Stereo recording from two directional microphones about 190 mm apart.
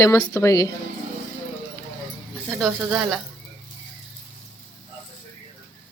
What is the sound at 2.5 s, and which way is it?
Speech, 5° right (ahead or behind).